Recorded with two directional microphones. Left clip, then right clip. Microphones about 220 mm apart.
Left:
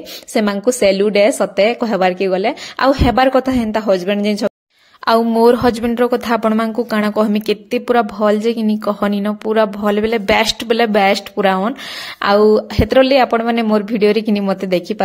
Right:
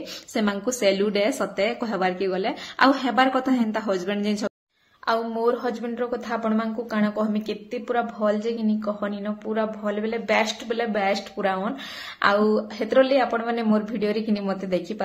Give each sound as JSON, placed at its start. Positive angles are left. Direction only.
{"t": 0.3, "sound": "a woman's voice", "side_deg": 35}
{"t": 5.0, "sound": "a woman's voice", "side_deg": 45}